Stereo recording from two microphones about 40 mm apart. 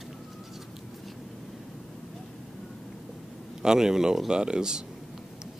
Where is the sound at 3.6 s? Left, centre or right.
Centre.